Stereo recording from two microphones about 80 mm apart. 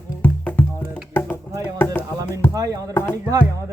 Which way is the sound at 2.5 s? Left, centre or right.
Right.